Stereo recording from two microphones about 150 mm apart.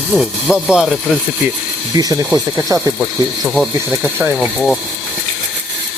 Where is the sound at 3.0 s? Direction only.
Centre (ahead or behind).